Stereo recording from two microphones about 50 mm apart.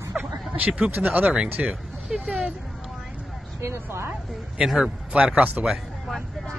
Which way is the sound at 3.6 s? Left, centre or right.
Right.